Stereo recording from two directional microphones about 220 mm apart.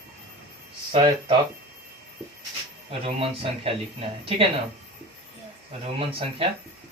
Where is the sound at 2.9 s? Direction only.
25° right (ahead or behind).